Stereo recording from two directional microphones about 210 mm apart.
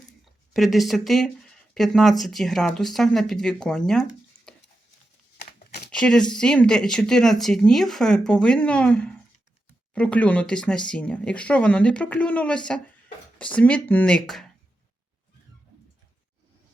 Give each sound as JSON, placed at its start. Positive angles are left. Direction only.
{"t": 0.5, "sound": "speech", "side_deg": 0}
{"t": 4.5, "sound": "stir", "side_deg": 5}
{"t": 5.4, "sound": "crumpling", "side_deg": 50}
{"t": 5.9, "sound": "speech", "side_deg": 5}